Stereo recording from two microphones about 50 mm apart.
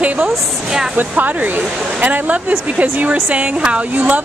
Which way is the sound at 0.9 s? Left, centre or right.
Right.